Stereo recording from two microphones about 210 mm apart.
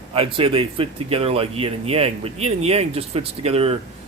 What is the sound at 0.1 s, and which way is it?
Speech, 25° right (ahead or behind).